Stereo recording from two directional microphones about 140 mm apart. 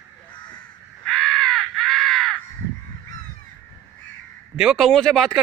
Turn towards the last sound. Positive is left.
turn(degrees=0)  # may be behind; listen again after turning